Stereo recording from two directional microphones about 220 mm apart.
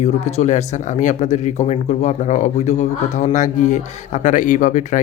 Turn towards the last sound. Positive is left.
turn(degrees=35)  # may be behind; listen again after turning